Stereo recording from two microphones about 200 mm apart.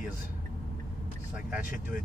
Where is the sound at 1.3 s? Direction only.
10° right (ahead or behind).